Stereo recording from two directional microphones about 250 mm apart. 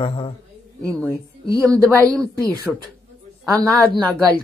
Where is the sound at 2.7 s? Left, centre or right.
Centre.